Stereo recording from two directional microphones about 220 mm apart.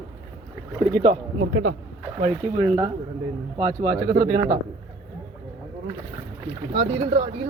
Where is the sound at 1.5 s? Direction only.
70° right (ahead or behind).